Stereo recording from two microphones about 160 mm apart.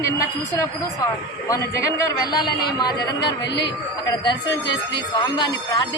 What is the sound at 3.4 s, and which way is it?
Speech, 90° left.